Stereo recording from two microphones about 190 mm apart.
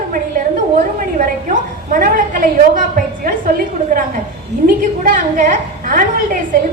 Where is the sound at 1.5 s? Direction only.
45° right (ahead or behind).